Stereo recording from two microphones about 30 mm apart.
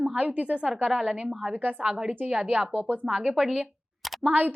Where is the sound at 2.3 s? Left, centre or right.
Right.